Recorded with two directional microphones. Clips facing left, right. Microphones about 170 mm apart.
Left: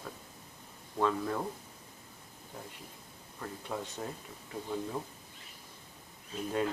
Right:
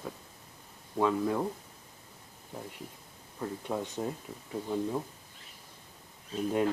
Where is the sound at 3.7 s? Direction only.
15° right (ahead or behind).